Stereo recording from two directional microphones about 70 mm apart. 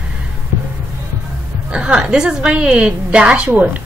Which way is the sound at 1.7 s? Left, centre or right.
Centre.